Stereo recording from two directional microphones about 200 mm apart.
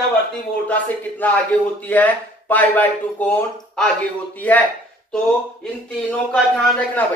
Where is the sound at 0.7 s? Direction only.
10° left (ahead or behind).